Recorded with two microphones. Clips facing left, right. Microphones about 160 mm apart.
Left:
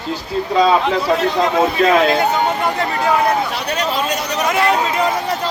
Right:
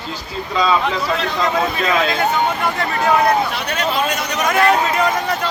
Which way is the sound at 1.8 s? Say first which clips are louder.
Left 7 dB; 45° left (ahead or behind).